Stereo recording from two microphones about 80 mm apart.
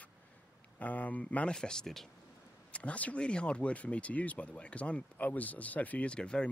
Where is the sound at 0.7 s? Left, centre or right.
Centre.